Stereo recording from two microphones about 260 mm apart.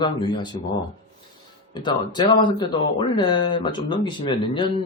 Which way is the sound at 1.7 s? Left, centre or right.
Centre.